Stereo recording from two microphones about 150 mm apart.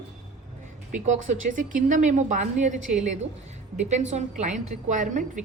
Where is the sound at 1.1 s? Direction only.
55° right (ahead or behind).